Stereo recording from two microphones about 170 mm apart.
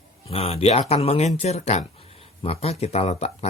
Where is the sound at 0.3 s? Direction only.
35° left (ahead or behind).